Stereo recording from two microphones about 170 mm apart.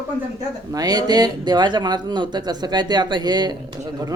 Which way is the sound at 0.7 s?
20° right (ahead or behind).